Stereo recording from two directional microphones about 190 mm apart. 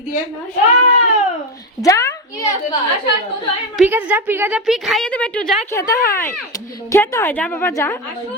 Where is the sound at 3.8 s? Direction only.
10° right (ahead or behind).